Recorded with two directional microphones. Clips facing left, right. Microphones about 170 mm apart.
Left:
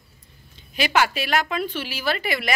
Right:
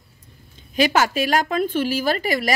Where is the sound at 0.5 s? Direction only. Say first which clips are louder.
Right 3 dB; 45° right (ahead or behind).